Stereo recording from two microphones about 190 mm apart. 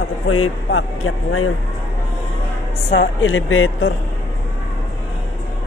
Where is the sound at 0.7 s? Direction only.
90° left.